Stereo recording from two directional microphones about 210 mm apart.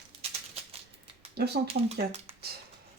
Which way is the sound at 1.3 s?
50° right (ahead or behind).